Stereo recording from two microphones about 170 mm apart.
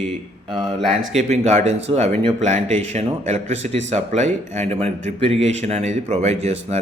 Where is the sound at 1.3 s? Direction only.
40° right (ahead or behind).